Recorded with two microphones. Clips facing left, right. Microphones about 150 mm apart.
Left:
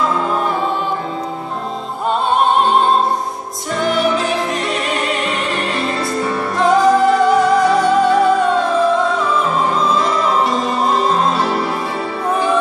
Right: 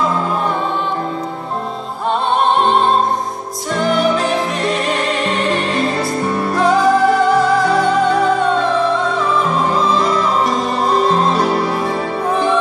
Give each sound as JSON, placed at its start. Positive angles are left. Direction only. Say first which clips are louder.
{"t": 6.6, "sound": "music", "louder": "left 1 dB", "side_deg": 0}